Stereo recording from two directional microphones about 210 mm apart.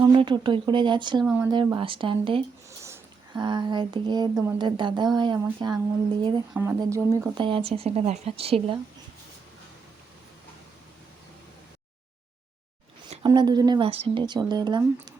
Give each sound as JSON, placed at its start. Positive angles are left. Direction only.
{"t": 0.0, "sound": "speech", "side_deg": -20}
{"t": 1.2, "sound": "speech", "side_deg": -5}
{"t": 1.5, "sound": "speech", "side_deg": -20}
{"t": 13.2, "sound": "speech", "side_deg": -20}